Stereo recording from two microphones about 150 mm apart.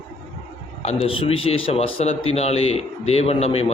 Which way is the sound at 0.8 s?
40° left (ahead or behind).